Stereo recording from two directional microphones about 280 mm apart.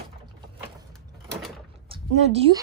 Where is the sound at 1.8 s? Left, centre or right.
Centre.